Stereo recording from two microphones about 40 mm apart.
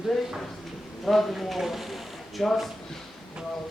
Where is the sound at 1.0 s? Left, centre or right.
Centre.